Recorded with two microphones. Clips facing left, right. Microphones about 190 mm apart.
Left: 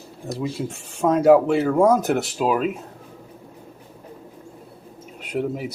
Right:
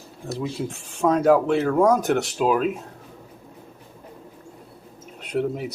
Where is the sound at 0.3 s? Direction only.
5° left (ahead or behind).